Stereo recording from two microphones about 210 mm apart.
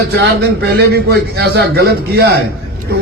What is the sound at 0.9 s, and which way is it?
A man's voice, 50° right (ahead or behind).